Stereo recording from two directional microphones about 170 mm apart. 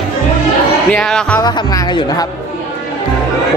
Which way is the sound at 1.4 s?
25° left (ahead or behind).